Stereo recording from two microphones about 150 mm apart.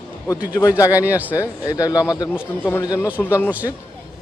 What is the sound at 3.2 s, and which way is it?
Speech, 15° left (ahead or behind).